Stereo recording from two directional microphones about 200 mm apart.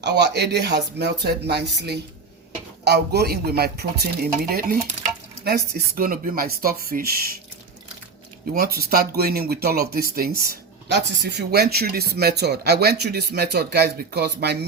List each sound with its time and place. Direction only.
0.0 s speech: 55° right (ahead or behind)
8.5 s speech: 50° right (ahead or behind)